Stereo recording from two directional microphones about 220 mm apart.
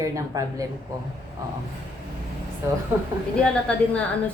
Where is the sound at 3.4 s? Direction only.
5° left (ahead or behind).